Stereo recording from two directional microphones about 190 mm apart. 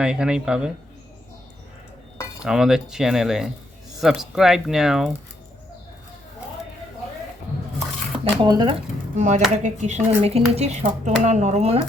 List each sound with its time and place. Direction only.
0.0 s speech: 5° right (ahead or behind)
2.4 s speech: 5° right (ahead or behind)
8.2 s speech: 25° right (ahead or behind)